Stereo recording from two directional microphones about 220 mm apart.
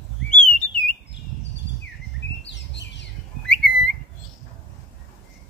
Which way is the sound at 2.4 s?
50° left (ahead or behind).